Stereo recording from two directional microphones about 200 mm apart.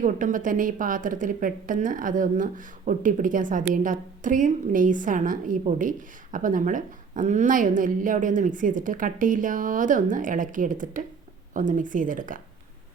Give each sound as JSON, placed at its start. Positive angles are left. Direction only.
{"t": 0.0, "sound": "a woman's voice", "side_deg": -40}